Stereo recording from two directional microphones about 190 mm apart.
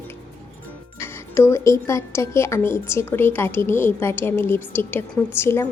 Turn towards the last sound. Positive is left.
turn(degrees=15)  # may be behind; listen again after turning